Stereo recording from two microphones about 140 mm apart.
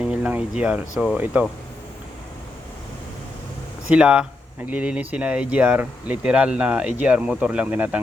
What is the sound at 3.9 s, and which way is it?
A man's voice, 5° right (ahead or behind).